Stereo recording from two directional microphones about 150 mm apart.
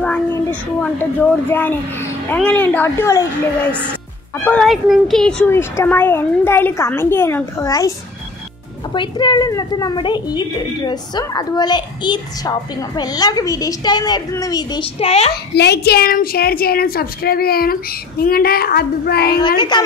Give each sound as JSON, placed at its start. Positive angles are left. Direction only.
{"t": 0.3, "sound": "a child's voice", "side_deg": 10}
{"t": 4.5, "sound": "speech", "side_deg": 0}
{"t": 5.5, "sound": "a woman's voice", "side_deg": 15}
{"t": 8.9, "sound": "a woman's voice", "side_deg": 30}
{"t": 15.0, "sound": "a child's voice", "side_deg": 45}
{"t": 15.5, "sound": "a woman's voice", "side_deg": 90}
{"t": 19.4, "sound": "a woman's voice", "side_deg": 30}